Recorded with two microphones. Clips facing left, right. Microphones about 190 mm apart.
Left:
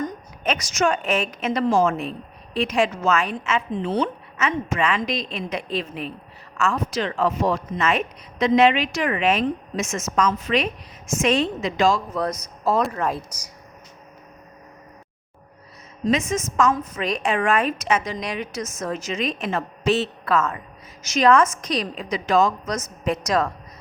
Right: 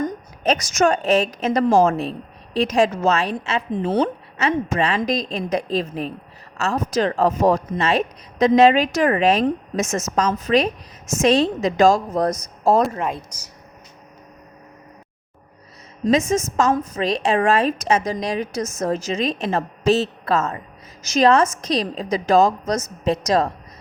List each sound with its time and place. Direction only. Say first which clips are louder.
0.4 s a woman's voice: right 4 dB; 45° right (ahead or behind)
13.1 s speech: left 1 dB; 5° left (ahead or behind)
16.0 s a woman's voice: right 4 dB; 35° right (ahead or behind)